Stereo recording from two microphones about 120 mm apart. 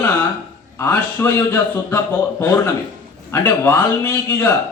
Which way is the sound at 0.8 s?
20° left (ahead or behind).